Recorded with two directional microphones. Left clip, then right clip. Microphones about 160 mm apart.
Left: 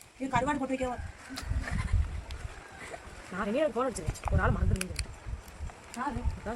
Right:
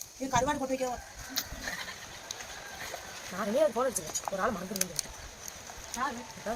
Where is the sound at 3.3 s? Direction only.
15° left (ahead or behind).